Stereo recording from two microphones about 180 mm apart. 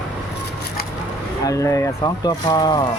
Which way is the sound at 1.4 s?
15° left (ahead or behind).